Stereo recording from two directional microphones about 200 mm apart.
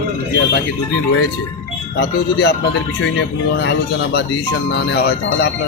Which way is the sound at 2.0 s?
55° left (ahead or behind).